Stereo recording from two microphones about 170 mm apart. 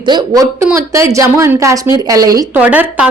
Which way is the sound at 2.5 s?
10° right (ahead or behind).